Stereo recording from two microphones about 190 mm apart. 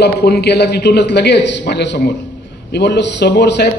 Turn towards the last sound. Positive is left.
turn(degrees=65)  # may be behind; listen again after turning